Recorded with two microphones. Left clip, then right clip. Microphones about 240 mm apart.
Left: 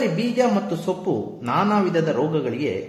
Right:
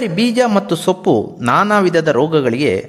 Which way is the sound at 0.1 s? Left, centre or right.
Right.